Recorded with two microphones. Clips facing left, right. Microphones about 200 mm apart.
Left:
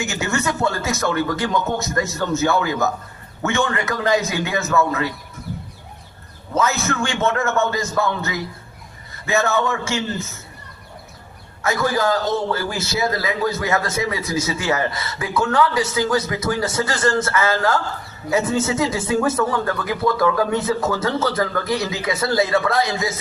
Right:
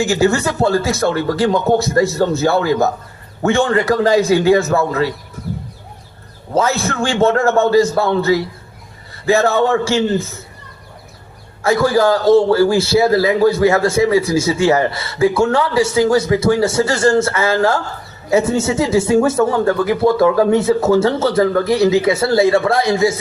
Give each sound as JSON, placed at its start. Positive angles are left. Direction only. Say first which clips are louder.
{"t": 0.0, "sound": "speech", "louder": "right 8 dB", "side_deg": -30}
{"t": 6.5, "sound": "speech", "louder": "right 4 dB", "side_deg": -30}
{"t": 11.6, "sound": "a man's voice", "louder": "right 7 dB", "side_deg": -30}